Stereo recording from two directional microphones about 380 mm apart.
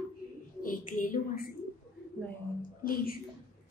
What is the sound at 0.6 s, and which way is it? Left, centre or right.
Speech, left.